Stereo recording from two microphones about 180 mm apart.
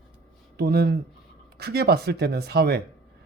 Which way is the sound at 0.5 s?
60° right (ahead or behind).